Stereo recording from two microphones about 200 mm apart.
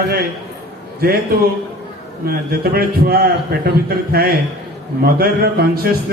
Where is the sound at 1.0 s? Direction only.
50° right (ahead or behind).